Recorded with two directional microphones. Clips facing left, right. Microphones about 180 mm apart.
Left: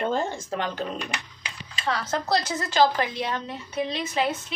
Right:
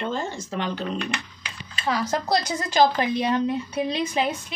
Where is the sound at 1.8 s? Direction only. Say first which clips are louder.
Right 2 dB; 10° right (ahead or behind).